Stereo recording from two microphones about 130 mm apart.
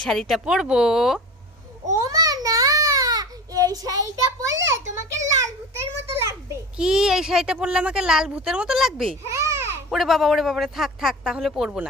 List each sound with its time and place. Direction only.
0.0 s speech: centre (ahead or behind)
1.9 s a sound: 25° right (ahead or behind)
6.7 s speech: 5° right (ahead or behind)
9.2 s babbling: 25° right (ahead or behind)
9.9 s speech: centre (ahead or behind)